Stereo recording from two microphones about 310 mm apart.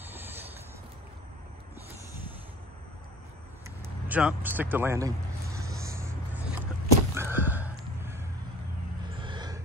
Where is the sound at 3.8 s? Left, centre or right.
Centre.